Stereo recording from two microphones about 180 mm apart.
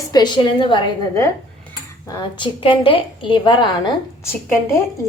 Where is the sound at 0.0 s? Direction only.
20° left (ahead or behind).